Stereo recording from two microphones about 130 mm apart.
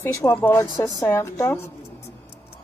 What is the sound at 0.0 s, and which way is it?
A woman's voice, 20° left (ahead or behind).